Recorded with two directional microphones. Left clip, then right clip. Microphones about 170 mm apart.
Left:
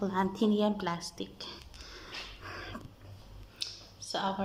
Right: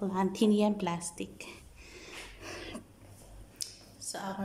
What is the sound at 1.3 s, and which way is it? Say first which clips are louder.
Throat clearing: left 3 dB; 25° right (ahead or behind).